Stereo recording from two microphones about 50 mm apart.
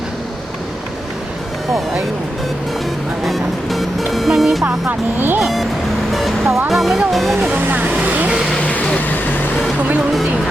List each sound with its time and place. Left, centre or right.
3.2 s speech: centre
7.5 s vehicle: right
8.6 s vehicle: left
9.0 s vehicle: left